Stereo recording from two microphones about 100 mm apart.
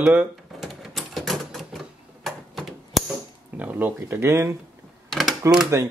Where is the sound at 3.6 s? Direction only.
15° right (ahead or behind).